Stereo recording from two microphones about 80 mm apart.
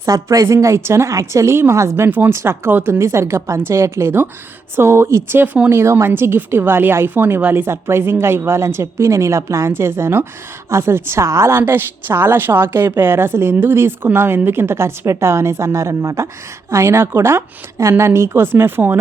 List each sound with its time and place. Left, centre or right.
0.0 s a woman's voice: right
2.0 s speech: right
2.3 s a woman's voice: right
3.0 s a woman's voice: right